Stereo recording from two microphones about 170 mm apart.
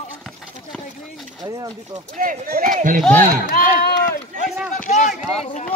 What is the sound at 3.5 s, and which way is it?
Speech, 55° left (ahead or behind).